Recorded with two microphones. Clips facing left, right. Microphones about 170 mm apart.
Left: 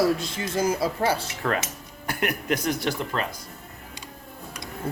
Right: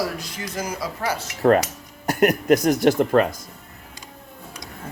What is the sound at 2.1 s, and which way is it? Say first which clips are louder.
Speech: right 9 dB; 40° right (ahead or behind).